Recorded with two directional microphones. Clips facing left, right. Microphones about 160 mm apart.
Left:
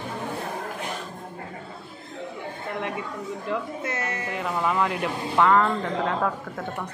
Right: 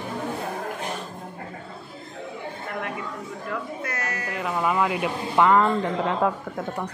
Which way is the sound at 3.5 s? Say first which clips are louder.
Left 2 dB; 25° left (ahead or behind).